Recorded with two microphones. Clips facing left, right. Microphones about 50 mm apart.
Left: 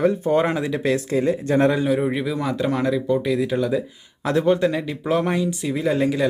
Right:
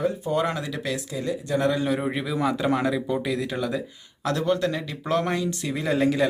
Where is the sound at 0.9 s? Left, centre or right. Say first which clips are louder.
Left 8 dB; left.